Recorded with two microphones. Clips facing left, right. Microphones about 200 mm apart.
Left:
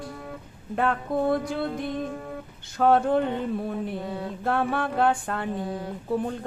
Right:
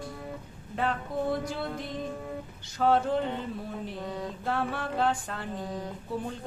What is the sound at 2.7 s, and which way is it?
Music, 55° left (ahead or behind).